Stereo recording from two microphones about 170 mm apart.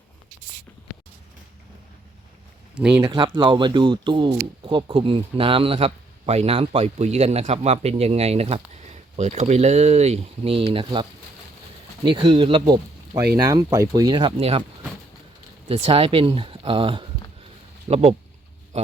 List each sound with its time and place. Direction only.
2.7 s speech: 5° right (ahead or behind)
3.0 s speech: 25° right (ahead or behind)
12.0 s speech: 30° right (ahead or behind)
15.7 s speech: 35° right (ahead or behind)